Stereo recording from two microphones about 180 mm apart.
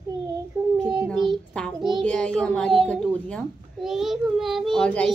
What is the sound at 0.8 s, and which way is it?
Child singing, 20° right (ahead or behind).